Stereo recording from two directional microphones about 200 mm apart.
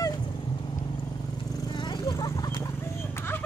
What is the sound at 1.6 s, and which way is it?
Horse, 20° left (ahead or behind).